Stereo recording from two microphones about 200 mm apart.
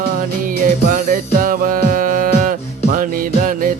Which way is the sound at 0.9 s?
40° right (ahead or behind).